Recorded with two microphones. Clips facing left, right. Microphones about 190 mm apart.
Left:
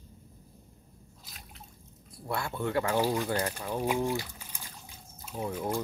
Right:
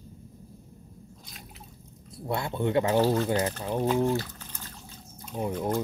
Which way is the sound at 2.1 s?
20° right (ahead or behind).